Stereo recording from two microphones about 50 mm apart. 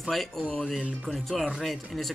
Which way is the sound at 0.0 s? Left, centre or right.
Centre.